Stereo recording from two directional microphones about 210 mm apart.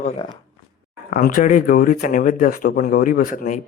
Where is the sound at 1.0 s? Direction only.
40° left (ahead or behind).